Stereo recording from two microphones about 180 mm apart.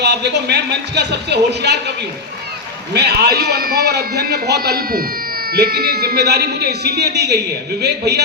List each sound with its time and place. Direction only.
0.0 s speech: 70° right (ahead or behind)
2.9 s a man's voice: 65° right (ahead or behind)